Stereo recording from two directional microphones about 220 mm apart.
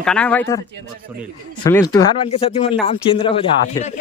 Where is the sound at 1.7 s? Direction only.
15° left (ahead or behind).